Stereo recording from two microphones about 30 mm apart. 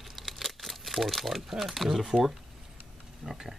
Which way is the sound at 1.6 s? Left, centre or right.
Centre.